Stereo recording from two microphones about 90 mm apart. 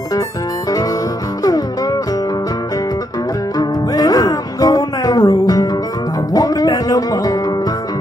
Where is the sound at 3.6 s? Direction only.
45° left (ahead or behind).